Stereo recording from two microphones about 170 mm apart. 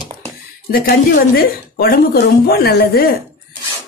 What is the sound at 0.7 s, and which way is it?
Speech, 60° left (ahead or behind).